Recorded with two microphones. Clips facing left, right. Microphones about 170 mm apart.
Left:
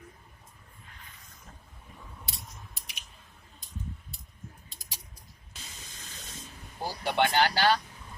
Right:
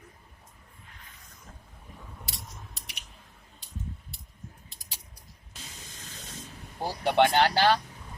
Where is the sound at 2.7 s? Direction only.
70° right (ahead or behind).